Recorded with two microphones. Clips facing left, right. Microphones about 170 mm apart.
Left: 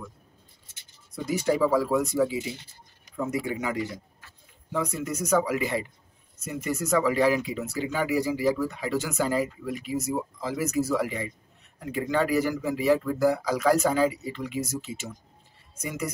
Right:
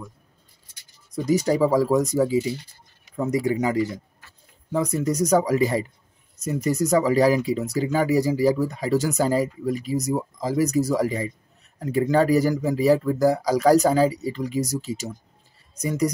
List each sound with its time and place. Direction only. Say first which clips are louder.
1.1 s speech: right 5 dB; 40° right (ahead or behind)
4.7 s speech: right 7 dB; 35° right (ahead or behind)